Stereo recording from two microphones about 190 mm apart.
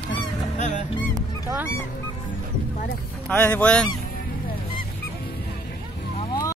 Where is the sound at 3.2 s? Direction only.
10° left (ahead or behind).